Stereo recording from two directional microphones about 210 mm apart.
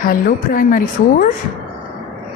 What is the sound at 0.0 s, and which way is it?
A woman's voice, 40° left (ahead or behind).